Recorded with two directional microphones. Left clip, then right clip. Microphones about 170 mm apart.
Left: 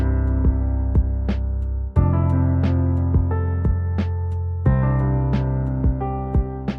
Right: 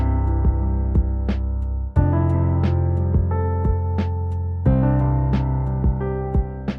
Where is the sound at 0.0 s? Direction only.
Centre (ahead or behind).